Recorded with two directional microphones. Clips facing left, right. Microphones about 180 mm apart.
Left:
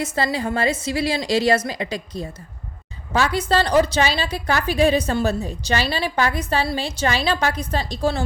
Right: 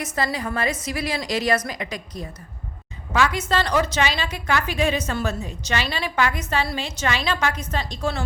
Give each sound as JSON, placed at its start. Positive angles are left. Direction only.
{"t": 0.0, "sound": "a woman's voice", "side_deg": 30}